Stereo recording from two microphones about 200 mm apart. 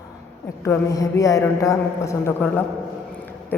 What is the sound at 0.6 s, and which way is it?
Speech, 15° left (ahead or behind).